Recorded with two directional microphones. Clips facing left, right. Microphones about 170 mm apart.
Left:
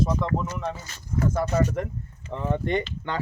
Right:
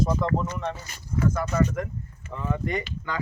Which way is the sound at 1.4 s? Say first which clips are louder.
Left 1 dB; 30° left (ahead or behind).